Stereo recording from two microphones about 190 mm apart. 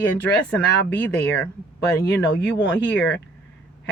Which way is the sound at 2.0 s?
65° left (ahead or behind).